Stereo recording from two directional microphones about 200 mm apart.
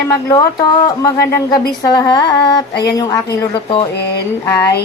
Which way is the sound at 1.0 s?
15° left (ahead or behind).